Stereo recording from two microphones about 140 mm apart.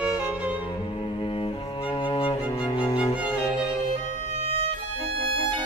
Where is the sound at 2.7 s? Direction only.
35° left (ahead or behind).